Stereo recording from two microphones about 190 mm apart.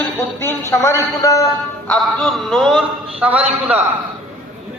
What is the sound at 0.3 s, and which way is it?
A man's voice, 15° left (ahead or behind).